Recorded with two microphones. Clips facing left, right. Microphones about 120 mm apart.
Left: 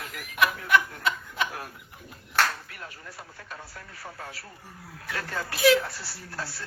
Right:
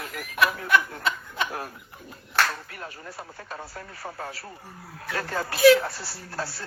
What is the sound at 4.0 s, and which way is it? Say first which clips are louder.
Speech: right 5 dB; 45° right (ahead or behind).